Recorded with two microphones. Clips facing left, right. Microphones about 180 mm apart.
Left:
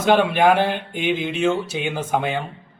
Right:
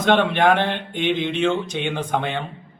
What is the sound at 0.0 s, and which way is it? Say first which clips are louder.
Speech: left 1 dB; 5° left (ahead or behind).